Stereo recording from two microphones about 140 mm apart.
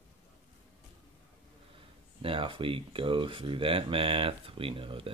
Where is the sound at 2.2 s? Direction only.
40° right (ahead or behind).